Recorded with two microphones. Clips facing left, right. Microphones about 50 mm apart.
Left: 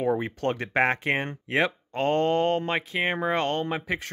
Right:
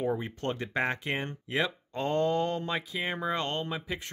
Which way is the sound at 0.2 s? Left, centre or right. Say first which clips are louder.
Left 6 dB; left.